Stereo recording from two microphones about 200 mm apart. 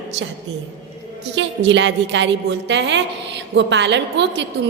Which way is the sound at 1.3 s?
65° right (ahead or behind).